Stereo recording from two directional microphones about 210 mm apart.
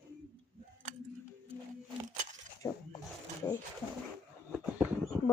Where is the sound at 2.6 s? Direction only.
15° left (ahead or behind).